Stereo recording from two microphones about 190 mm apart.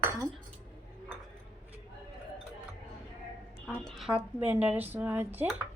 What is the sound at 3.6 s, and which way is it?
A woman's voice, centre (ahead or behind).